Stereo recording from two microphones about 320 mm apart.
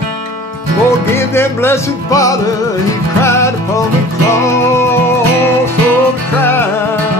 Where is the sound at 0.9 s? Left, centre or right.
Centre.